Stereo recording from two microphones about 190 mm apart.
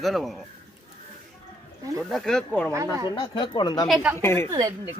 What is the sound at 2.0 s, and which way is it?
Speech, centre (ahead or behind).